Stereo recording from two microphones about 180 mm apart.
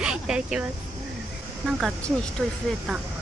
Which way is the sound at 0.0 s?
5° right (ahead or behind).